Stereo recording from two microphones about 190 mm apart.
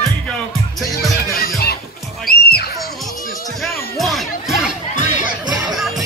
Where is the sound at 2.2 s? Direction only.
55° left (ahead or behind).